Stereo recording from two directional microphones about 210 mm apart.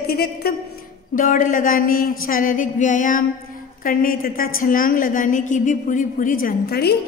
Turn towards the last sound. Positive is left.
turn(degrees=50)  # may be behind; listen again after turning